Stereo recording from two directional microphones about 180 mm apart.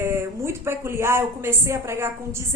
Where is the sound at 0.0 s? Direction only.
15° right (ahead or behind).